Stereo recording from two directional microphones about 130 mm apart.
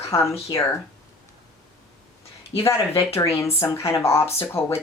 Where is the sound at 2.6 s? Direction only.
20° left (ahead or behind).